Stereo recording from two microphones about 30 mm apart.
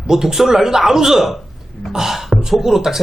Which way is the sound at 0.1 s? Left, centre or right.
Centre.